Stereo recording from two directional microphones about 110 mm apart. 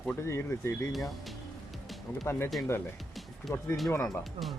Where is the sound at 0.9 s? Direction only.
Centre (ahead or behind).